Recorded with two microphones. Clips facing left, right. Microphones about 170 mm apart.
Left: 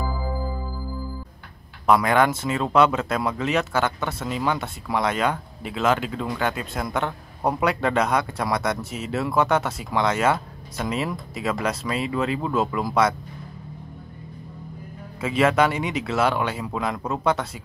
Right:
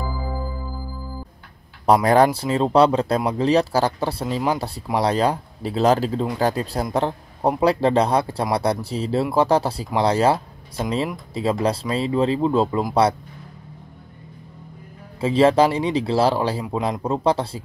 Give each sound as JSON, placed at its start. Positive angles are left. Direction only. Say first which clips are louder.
{"t": 2.0, "sound": "speech", "louder": "right 4 dB", "side_deg": -35}
{"t": 15.1, "sound": "speech", "louder": "right 4 dB", "side_deg": -30}